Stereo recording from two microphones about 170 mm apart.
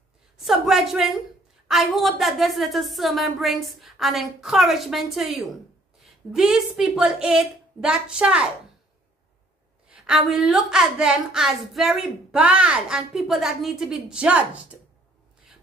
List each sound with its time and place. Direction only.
0.4 s a woman's voice: centre (ahead or behind)
9.8 s a woman's voice: 5° right (ahead or behind)